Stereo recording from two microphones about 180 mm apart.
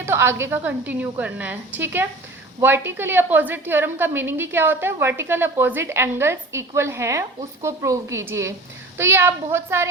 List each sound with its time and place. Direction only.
0.0 s a woman's voice: 15° right (ahead or behind)